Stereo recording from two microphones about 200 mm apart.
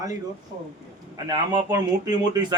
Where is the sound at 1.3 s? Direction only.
20° right (ahead or behind).